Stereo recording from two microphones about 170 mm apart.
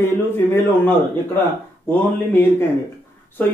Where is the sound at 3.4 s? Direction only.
10° left (ahead or behind).